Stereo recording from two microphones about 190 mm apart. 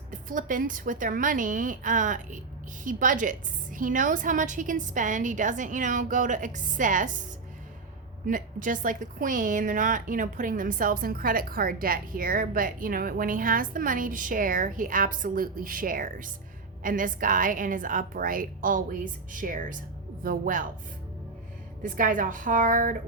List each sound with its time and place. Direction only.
0.1 s a woman's voice: 45° right (ahead or behind)
8.3 s a woman's voice: 45° right (ahead or behind)
21.8 s a woman's voice: 45° right (ahead or behind)